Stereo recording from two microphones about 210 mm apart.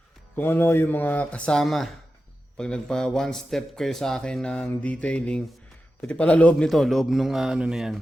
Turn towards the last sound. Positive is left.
turn(degrees=0)  # may be behind; listen again after turning